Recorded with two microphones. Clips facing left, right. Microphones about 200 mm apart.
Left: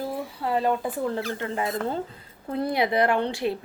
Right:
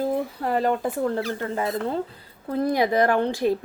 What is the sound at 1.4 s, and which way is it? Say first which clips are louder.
Speech: right 2 dB; 35° right (ahead or behind).